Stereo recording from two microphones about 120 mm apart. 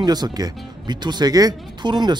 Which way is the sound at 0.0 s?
35° right (ahead or behind).